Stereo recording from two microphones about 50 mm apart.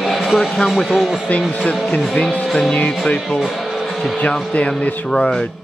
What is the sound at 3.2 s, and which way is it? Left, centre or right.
Speech, centre.